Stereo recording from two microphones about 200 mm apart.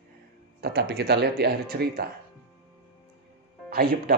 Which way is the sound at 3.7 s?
50° right (ahead or behind).